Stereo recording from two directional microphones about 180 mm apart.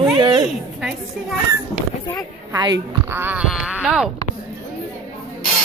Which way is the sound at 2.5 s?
25° right (ahead or behind).